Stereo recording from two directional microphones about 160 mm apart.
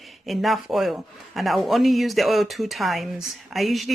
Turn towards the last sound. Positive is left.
turn(degrees=0)  # may be behind; listen again after turning